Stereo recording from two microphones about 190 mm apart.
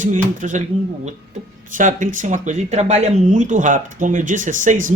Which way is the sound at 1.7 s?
40° right (ahead or behind).